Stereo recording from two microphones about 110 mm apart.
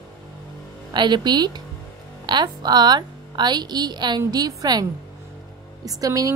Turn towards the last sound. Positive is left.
turn(degrees=-30)  # may be behind; listen again after turning